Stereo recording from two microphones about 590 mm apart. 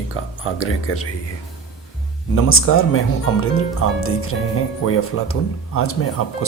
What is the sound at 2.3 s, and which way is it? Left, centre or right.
Speech, left.